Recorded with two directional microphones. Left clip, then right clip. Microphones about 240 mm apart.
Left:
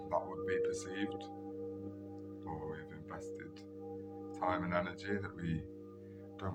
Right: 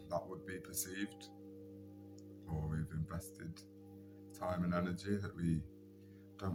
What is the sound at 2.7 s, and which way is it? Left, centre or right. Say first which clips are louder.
Speech: left 2 dB; centre.